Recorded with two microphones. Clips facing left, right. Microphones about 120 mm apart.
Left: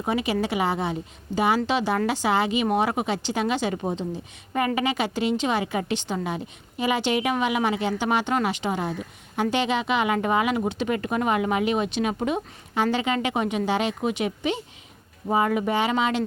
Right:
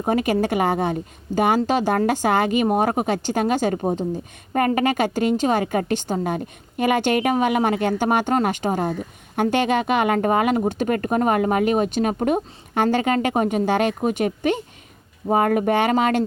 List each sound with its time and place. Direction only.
0.0 s a woman's voice: 45° right (ahead or behind)